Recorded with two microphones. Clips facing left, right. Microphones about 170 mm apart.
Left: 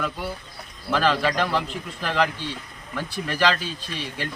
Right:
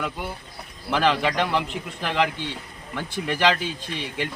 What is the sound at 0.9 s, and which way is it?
Speech, 20° right (ahead or behind).